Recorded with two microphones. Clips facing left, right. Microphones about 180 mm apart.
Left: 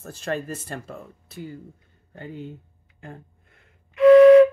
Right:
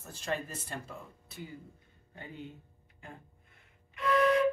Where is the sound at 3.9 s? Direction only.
90° left.